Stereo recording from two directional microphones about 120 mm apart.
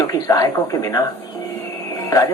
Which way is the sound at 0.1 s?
30° left (ahead or behind).